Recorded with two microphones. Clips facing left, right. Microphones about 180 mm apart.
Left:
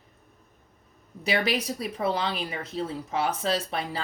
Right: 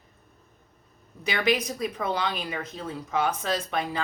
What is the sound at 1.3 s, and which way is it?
A woman's voice, 35° left (ahead or behind).